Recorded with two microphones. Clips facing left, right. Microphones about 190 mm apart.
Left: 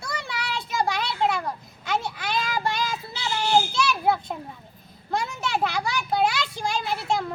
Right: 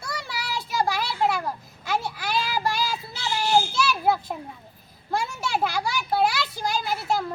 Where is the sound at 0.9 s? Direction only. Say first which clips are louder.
Even; 5° right (ahead or behind).